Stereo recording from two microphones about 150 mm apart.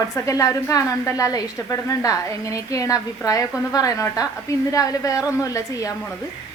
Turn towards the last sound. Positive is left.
turn(degrees=20)  # may be behind; listen again after turning